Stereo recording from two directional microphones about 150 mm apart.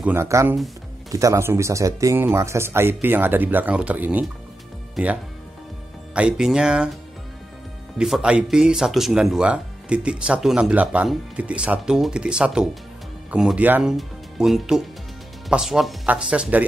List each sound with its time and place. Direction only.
0.0 s speech: 15° right (ahead or behind)
8.0 s speech: 5° right (ahead or behind)